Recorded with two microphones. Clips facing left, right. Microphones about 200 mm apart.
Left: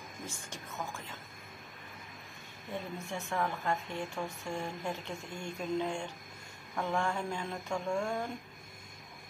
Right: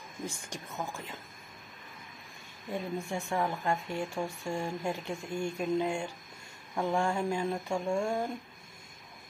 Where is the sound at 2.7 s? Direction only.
15° right (ahead or behind).